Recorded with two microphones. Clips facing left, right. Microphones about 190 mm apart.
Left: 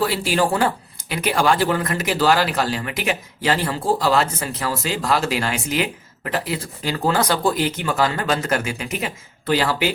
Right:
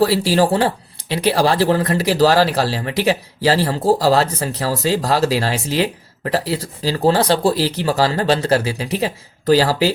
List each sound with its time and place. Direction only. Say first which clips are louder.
0.0 s speech: right 5 dB; 35° right (ahead or behind)